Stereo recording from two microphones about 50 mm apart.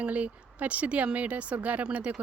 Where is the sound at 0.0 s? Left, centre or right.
Right.